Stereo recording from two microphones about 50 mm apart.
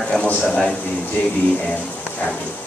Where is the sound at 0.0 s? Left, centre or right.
Centre.